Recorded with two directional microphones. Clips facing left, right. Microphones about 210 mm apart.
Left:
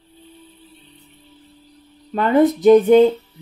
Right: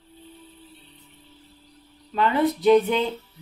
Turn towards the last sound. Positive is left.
turn(degrees=45)  # may be behind; listen again after turning